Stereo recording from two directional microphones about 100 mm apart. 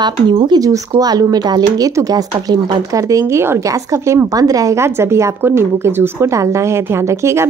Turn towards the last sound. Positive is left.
turn(degrees=-30)  # may be behind; listen again after turning